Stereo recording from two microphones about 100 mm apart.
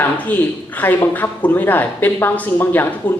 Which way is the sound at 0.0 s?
15° left (ahead or behind).